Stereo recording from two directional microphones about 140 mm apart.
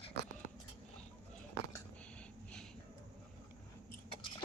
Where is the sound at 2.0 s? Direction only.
10° left (ahead or behind).